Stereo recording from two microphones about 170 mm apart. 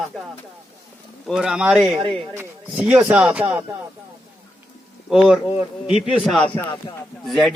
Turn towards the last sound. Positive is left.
turn(degrees=0)  # may be behind; listen again after turning